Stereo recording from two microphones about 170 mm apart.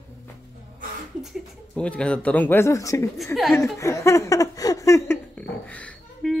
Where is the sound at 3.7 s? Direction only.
15° left (ahead or behind).